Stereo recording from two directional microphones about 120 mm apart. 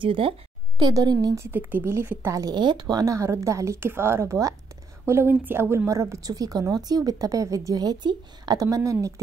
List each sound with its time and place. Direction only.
0.0 s a woman's voice: 45° right (ahead or behind); by 2.4 s 20° right (ahead or behind)
2.4 s speech: 40° right (ahead or behind)